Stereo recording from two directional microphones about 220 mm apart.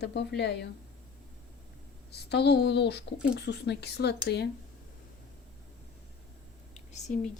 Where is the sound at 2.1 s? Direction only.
50° left (ahead or behind).